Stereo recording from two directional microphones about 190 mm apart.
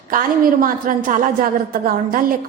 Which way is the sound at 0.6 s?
45° right (ahead or behind).